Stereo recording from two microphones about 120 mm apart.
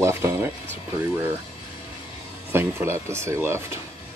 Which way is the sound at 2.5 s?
20° right (ahead or behind).